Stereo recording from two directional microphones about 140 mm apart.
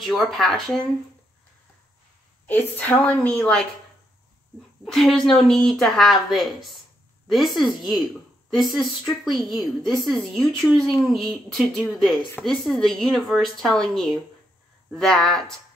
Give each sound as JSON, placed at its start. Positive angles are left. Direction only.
{"t": 0.0, "sound": "a woman's voice", "side_deg": 0}
{"t": 2.7, "sound": "speech", "side_deg": 10}
{"t": 4.8, "sound": "a woman's voice", "side_deg": 0}